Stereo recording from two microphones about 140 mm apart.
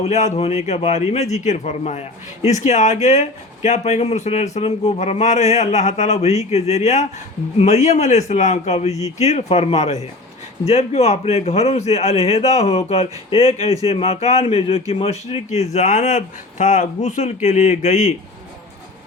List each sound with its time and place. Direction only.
0.0 s a man's voice: 55° left (ahead or behind)
15.7 s speech: 60° left (ahead or behind)